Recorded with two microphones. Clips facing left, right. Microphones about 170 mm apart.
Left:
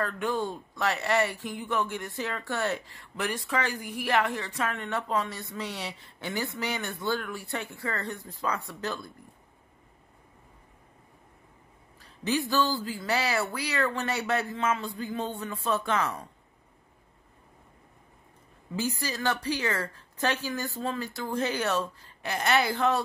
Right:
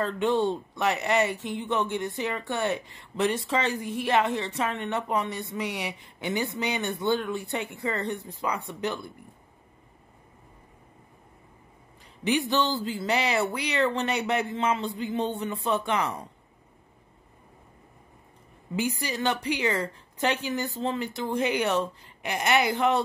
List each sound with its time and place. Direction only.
0.0 s speech: 20° right (ahead or behind)
12.0 s speech: 20° right (ahead or behind)
18.8 s speech: 15° right (ahead or behind)